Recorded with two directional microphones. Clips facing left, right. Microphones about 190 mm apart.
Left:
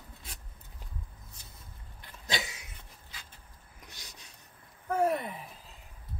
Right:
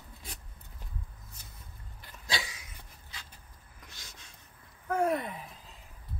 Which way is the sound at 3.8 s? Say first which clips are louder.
Left 1 dB; 15° left (ahead or behind).